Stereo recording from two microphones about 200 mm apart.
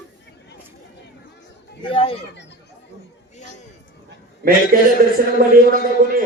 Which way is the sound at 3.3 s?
35° left (ahead or behind).